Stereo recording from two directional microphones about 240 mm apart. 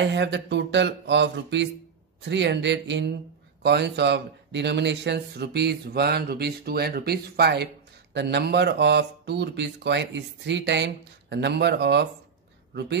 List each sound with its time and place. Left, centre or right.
0.1 s speech: right